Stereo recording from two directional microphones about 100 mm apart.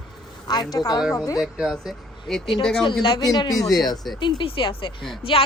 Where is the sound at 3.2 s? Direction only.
40° left (ahead or behind).